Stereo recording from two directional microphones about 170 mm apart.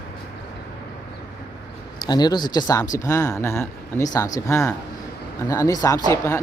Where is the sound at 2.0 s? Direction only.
25° left (ahead or behind).